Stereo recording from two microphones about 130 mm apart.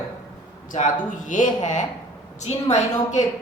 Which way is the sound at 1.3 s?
75° left (ahead or behind).